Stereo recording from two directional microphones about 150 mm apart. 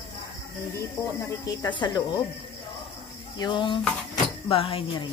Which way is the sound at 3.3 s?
30° left (ahead or behind).